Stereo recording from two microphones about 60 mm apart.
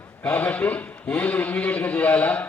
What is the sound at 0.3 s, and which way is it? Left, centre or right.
A man's voice, left.